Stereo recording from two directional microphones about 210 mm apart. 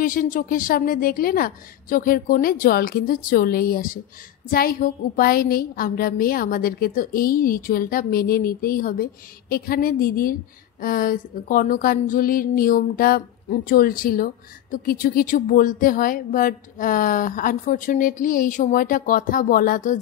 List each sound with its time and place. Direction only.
0.0 s a woman's voice: 40° left (ahead or behind)